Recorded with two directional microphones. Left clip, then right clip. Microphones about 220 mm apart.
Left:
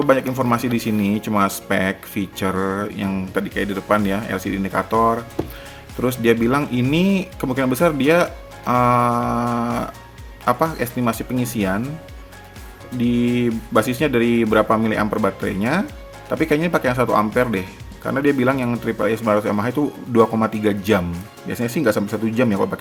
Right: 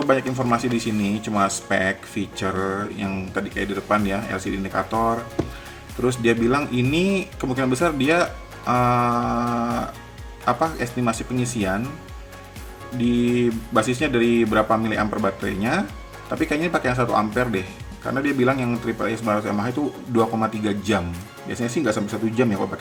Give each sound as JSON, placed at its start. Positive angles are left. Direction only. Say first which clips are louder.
{"t": 0.0, "sound": "speech", "louder": "left 3 dB", "side_deg": 40}
{"t": 13.1, "sound": "speech", "louder": "left 1 dB", "side_deg": 35}